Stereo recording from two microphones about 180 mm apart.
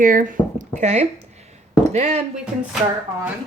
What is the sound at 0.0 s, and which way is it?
Speech, 50° right (ahead or behind).